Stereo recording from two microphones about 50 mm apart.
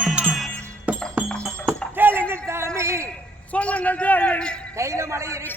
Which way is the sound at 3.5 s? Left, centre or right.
Left.